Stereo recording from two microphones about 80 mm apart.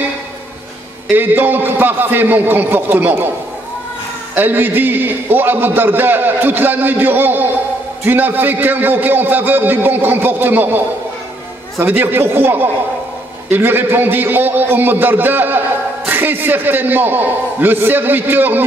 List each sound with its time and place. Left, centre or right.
1.1 s a man's voice: right
4.4 s a man's voice: right
11.8 s a man's voice: right